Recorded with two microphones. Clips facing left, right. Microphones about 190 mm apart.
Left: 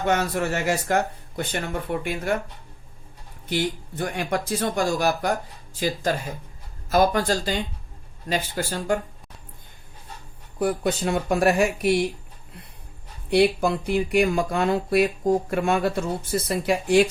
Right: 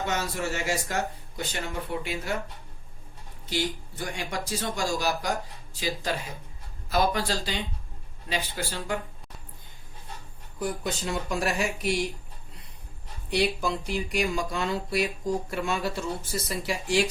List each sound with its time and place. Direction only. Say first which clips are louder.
0.0 s speech: left 6 dB; 55° left (ahead or behind)
3.4 s speech: left 4 dB; 55° left (ahead or behind)
10.6 s speech: left 7 dB; 60° left (ahead or behind)
13.3 s speech: left 7 dB; 55° left (ahead or behind)